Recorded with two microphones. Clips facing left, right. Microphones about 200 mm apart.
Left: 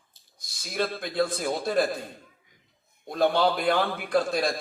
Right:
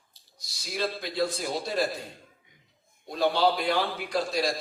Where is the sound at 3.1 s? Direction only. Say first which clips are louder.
Left 1 dB; 50° left (ahead or behind).